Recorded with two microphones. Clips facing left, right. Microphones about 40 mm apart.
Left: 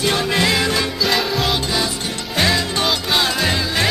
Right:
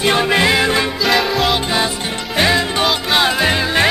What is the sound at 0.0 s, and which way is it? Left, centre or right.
Music, right.